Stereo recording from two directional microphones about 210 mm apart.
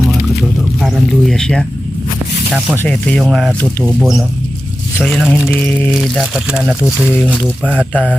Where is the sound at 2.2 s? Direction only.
15° right (ahead or behind).